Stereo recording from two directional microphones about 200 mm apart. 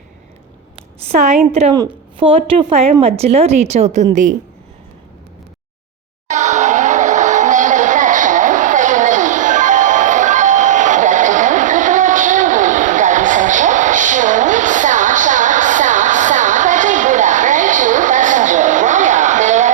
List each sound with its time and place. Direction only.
0.9 s a woman's voice: 30° right (ahead or behind)
1.7 s a woman's voice: 20° right (ahead or behind); by 4.4 s 40° right (ahead or behind)
6.2 s music: 35° right (ahead or behind)